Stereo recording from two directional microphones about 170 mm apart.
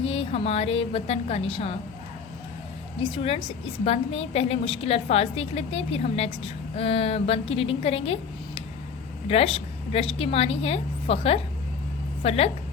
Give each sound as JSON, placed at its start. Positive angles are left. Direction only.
{"t": 0.0, "sound": "a woman's voice", "side_deg": 35}
{"t": 3.0, "sound": "a woman's voice", "side_deg": 30}